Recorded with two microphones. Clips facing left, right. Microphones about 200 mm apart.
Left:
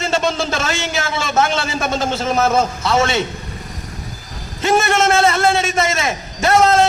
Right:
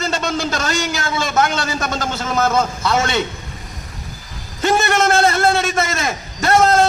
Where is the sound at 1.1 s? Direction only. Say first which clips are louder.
Even; 25° left (ahead or behind).